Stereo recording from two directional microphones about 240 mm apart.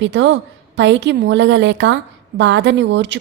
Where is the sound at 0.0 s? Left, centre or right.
Right.